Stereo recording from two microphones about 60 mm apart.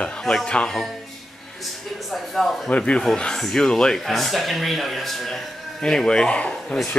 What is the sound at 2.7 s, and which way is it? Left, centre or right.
Speech, left.